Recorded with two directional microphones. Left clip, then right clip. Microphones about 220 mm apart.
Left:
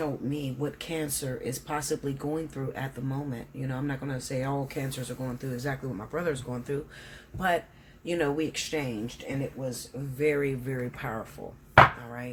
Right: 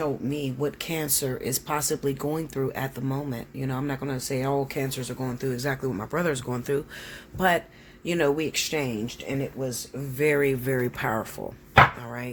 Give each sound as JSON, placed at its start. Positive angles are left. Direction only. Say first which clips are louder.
{"t": 0.0, "sound": "speech", "louder": "right 4 dB", "side_deg": -40}
{"t": 10.2, "sound": "speech", "louder": "right 4 dB", "side_deg": -50}